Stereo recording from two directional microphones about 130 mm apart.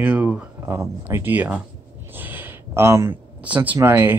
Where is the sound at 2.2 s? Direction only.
15° right (ahead or behind).